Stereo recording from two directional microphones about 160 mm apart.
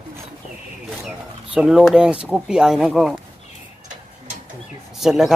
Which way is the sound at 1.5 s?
5° right (ahead or behind).